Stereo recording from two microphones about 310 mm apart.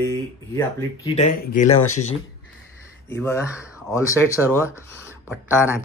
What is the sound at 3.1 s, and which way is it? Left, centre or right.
Speech, centre.